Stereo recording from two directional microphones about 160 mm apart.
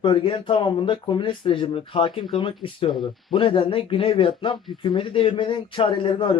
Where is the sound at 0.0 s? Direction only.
30° left (ahead or behind).